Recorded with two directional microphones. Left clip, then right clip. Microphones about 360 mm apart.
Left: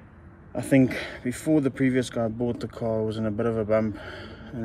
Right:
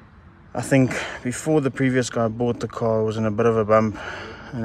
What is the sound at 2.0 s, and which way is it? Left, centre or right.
Speech, right.